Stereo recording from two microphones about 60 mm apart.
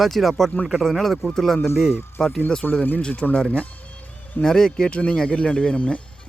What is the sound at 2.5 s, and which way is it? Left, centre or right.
Speech, centre.